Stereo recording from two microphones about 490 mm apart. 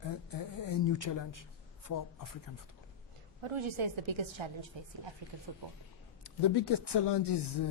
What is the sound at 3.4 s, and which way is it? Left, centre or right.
A woman's voice, right.